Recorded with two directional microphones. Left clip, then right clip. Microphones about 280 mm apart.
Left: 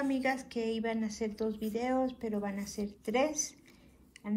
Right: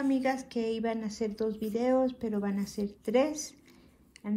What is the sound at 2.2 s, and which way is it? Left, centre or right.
Speech, right.